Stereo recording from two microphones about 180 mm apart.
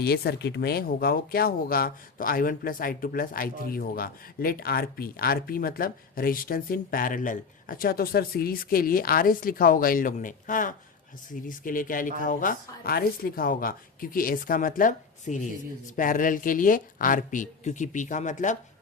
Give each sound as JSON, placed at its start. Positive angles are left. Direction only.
{"t": 0.0, "sound": "speech", "side_deg": 60}